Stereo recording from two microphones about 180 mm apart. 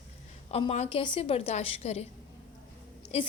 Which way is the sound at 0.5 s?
35° left (ahead or behind).